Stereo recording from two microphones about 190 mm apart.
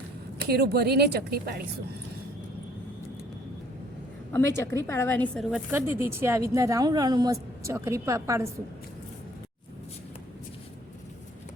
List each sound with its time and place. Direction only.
0.4 s speech: 55° right (ahead or behind)
4.3 s a woman's voice: 10° left (ahead or behind)
5.8 s speech: 10° right (ahead or behind)